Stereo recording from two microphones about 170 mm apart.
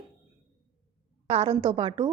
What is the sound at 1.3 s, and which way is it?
Speech, 40° right (ahead or behind).